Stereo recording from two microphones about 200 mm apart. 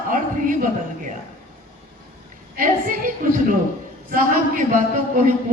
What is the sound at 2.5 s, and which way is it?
A man's voice, 40° right (ahead or behind).